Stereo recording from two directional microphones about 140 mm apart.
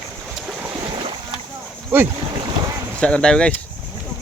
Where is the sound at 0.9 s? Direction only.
45° right (ahead or behind).